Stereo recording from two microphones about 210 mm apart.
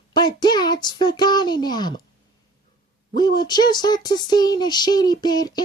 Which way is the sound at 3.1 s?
20° left (ahead or behind).